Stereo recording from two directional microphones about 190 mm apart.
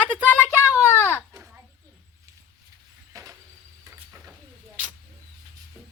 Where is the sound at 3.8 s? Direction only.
15° right (ahead or behind).